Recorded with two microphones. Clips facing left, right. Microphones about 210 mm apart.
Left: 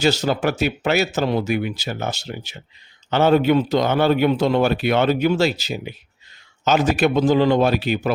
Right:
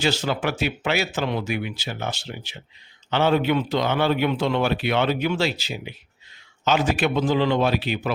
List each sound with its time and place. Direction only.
0.0 s a man's voice: 40° left (ahead or behind)